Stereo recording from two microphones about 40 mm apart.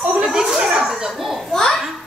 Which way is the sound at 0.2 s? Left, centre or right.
Centre.